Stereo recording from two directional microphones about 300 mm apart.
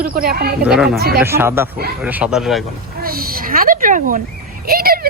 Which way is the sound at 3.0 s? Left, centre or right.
Right.